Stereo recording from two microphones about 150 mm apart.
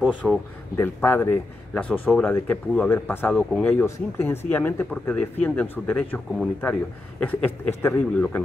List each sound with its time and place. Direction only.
0.2 s speech: centre (ahead or behind)
0.7 s speech: 15° left (ahead or behind)